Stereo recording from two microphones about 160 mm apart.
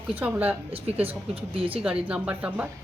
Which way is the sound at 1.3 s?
35° right (ahead or behind).